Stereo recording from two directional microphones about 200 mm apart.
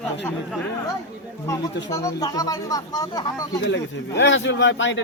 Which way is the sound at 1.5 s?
15° left (ahead or behind).